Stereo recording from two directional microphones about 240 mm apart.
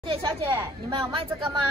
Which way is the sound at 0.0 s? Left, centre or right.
Right.